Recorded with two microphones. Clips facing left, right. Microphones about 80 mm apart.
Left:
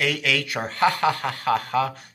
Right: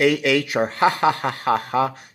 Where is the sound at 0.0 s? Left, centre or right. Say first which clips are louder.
Right 7 dB; right.